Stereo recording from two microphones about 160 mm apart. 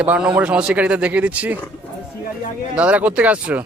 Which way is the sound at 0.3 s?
5° right (ahead or behind).